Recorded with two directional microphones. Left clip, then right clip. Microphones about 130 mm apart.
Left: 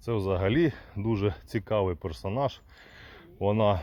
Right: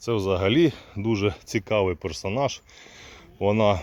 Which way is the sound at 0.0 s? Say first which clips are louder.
Right 5 dB; 15° right (ahead or behind).